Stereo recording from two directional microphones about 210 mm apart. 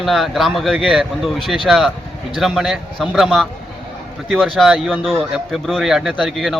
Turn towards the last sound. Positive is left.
turn(degrees=0)  # may be behind; listen again after turning